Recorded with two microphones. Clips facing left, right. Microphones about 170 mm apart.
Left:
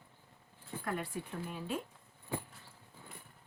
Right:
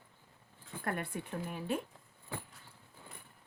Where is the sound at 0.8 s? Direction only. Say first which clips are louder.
Right 1 dB; 60° right (ahead or behind).